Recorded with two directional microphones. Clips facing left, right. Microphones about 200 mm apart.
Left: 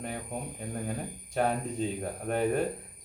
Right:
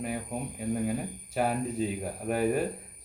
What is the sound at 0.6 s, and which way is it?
Speech, 5° right (ahead or behind).